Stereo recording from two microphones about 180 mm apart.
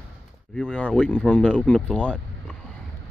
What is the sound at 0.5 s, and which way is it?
Speech, 5° left (ahead or behind).